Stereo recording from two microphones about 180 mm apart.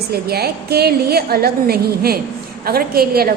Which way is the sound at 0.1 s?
60° right (ahead or behind).